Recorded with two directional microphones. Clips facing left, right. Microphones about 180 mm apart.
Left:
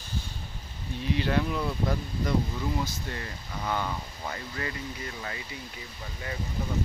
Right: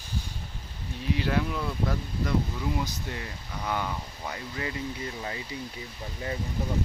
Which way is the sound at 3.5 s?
5° right (ahead or behind).